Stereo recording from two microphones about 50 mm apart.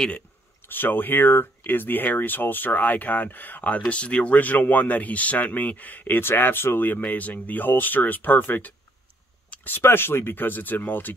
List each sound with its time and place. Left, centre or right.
0.7 s speech: left
9.8 s speech: left